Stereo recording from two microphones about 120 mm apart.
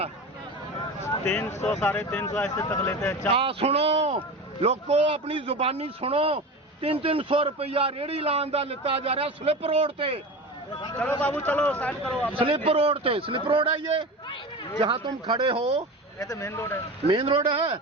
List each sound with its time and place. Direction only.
1.2 s speech: 20° left (ahead or behind)
2.6 s speech: 25° left (ahead or behind)
3.3 s a man's voice: 50° right (ahead or behind)
10.9 s speech: 10° left (ahead or behind)
12.3 s a man's voice: 50° right (ahead or behind)
14.3 s a sound: 40° left (ahead or behind)
14.8 s a man's voice: 45° right (ahead or behind)
16.1 s speech: 25° left (ahead or behind)
17.1 s a man's voice: 45° right (ahead or behind)